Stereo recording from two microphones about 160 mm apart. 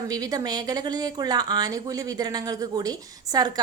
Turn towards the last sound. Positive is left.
turn(degrees=-25)  # may be behind; listen again after turning